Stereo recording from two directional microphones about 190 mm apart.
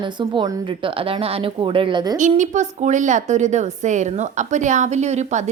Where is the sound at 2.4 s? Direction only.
40° right (ahead or behind).